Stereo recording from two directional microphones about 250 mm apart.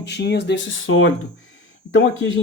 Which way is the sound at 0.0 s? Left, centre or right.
Left.